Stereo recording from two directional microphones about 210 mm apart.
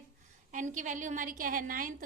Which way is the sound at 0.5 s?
35° right (ahead or behind).